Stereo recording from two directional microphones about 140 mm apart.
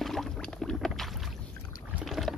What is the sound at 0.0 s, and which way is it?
Boat, centre (ahead or behind).